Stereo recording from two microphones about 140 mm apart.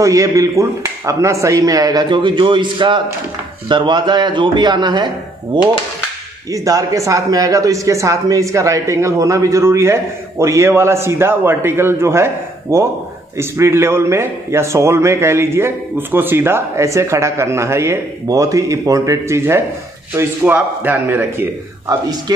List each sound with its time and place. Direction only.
0.0 s a man's voice: 25° right (ahead or behind)
6.5 s a man's voice: 25° right (ahead or behind)